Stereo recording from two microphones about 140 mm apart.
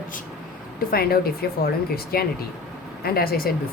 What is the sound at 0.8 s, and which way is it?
Speech, 90° left.